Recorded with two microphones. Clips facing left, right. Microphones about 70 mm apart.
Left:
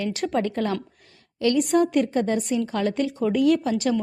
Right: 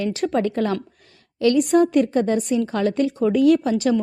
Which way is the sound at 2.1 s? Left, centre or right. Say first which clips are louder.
Right 3 dB; right.